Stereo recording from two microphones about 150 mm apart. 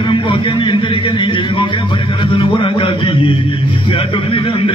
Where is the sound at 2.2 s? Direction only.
35° left (ahead or behind).